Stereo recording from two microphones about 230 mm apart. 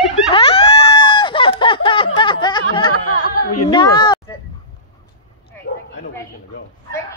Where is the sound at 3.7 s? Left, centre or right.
Centre.